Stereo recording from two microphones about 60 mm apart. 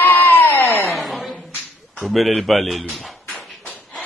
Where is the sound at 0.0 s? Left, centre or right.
Left.